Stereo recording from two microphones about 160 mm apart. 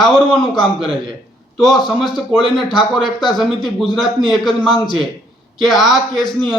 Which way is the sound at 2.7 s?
30° left (ahead or behind).